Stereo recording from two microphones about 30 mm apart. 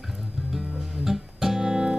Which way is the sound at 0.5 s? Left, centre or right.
Centre.